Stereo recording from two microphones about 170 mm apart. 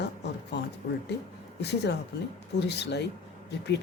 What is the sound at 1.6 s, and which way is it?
A woman's voice, 80° left.